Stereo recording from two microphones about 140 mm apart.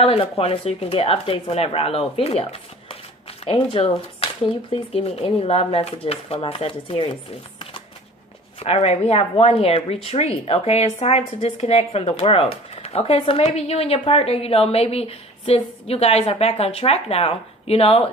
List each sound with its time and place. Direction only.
0.0 s speech: 45° left (ahead or behind)
8.5 s speech: 45° left (ahead or behind)